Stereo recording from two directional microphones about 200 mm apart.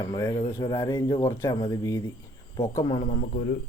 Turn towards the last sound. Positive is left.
turn(degrees=40)  # may be behind; listen again after turning